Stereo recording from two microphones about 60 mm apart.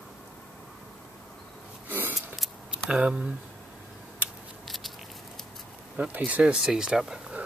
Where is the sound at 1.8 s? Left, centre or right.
Right.